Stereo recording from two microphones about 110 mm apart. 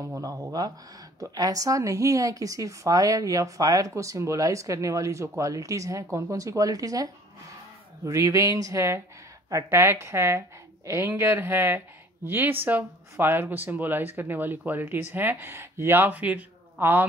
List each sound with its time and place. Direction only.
0.2 s speech: 35° right (ahead or behind); by 17.0 s 15° right (ahead or behind)